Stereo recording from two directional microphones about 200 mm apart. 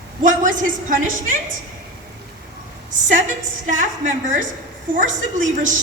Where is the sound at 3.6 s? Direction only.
40° right (ahead or behind).